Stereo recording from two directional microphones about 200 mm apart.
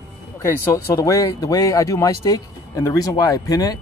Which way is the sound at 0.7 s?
15° left (ahead or behind).